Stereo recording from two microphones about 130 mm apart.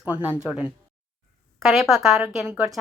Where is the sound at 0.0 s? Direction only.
10° right (ahead or behind).